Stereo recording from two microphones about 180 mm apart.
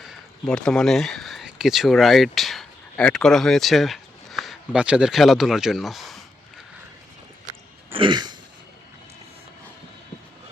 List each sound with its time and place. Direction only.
0.0 s speech: centre (ahead or behind)
7.9 s throat clearing: 25° right (ahead or behind)